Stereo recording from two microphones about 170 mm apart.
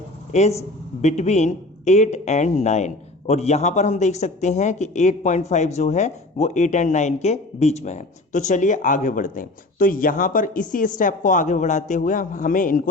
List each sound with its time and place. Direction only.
1.0 s speech: 40° left (ahead or behind)